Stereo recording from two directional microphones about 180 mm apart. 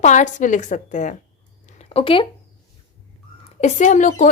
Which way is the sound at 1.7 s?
30° left (ahead or behind).